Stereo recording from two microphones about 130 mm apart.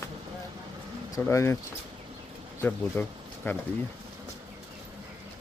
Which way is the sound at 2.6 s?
15° left (ahead or behind).